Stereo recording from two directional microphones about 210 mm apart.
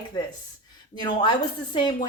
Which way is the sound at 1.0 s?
20° left (ahead or behind).